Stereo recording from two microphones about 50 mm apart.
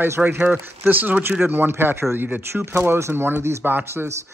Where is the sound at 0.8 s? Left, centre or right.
Right.